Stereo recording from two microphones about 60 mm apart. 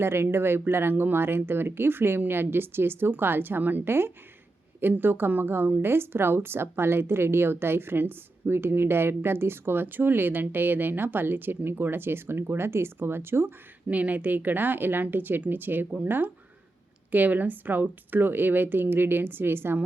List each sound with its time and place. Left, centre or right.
0.0 s speech: right
13.8 s speech: right